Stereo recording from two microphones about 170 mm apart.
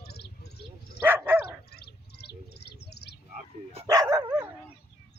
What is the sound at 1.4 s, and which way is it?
Bird, 70° left (ahead or behind).